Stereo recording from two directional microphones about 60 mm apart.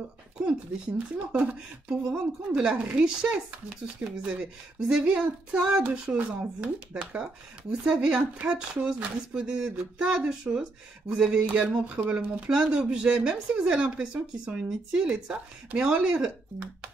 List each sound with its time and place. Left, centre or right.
0.5 s speech: right